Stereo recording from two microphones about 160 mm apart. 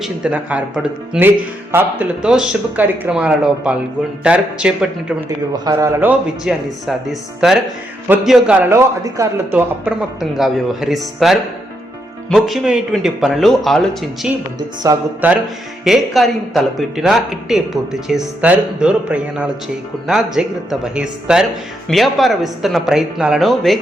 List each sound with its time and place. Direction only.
0.0 s speech: 5° right (ahead or behind)
5.5 s speech: 20° right (ahead or behind)
10.2 s speech: centre (ahead or behind)
14.9 s speech: 20° right (ahead or behind)
15.8 s speech: centre (ahead or behind)